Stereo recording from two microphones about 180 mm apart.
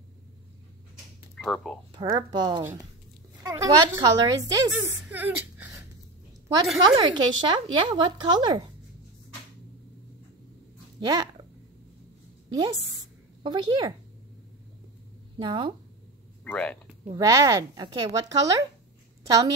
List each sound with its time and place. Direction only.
1.3 s speech: 5° left (ahead or behind)
2.1 s speech: 20° right (ahead or behind)
5.0 s a sound: 10° right (ahead or behind)
6.9 s speech: 25° right (ahead or behind)
11.0 s speech: 25° right (ahead or behind)
13.4 s speech: 25° right (ahead or behind)
15.3 s speech: 30° right (ahead or behind)
16.4 s speech: 5° left (ahead or behind)
17.0 s a woman's voice: 20° right (ahead or behind)